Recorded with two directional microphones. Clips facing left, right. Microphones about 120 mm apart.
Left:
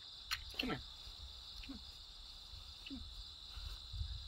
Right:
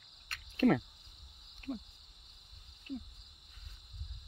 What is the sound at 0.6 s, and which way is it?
Cricket, 55° right (ahead or behind).